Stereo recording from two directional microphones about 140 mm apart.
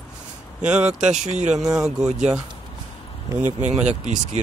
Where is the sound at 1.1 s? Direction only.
55° right (ahead or behind).